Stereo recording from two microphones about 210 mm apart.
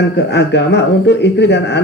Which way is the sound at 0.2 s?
55° left (ahead or behind).